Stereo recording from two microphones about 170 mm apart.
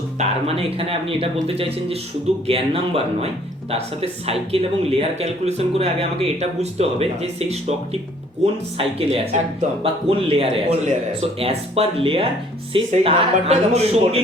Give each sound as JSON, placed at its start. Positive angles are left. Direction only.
{"t": 0.2, "sound": "speech", "side_deg": -35}
{"t": 8.8, "sound": "speech", "side_deg": -35}